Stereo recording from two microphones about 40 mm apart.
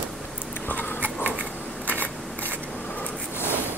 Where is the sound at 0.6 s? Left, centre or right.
Left.